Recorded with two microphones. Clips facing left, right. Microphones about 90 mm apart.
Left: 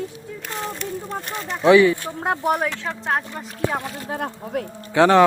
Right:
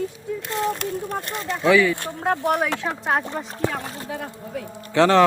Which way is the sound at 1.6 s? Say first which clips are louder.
Left 4 dB; 20° left (ahead or behind).